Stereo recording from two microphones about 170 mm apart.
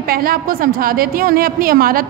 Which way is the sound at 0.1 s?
60° right (ahead or behind).